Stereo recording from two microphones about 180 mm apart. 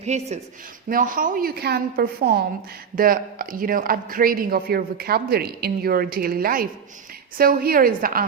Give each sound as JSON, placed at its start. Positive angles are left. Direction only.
{"t": 0.0, "sound": "speech", "side_deg": -40}
{"t": 0.9, "sound": "a woman's voice", "side_deg": -50}